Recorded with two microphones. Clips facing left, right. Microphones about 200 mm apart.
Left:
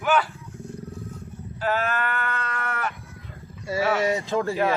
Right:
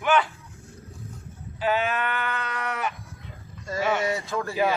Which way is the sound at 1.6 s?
Centre (ahead or behind).